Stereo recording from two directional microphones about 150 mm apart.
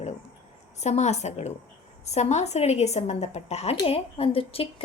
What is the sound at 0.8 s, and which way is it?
A woman's voice, 50° left (ahead or behind).